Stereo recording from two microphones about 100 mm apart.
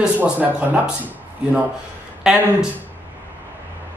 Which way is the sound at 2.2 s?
5° right (ahead or behind).